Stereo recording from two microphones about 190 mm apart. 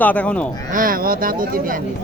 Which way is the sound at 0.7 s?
45° right (ahead or behind).